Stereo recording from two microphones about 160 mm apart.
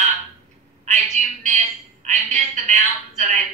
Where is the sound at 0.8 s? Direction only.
50° right (ahead or behind).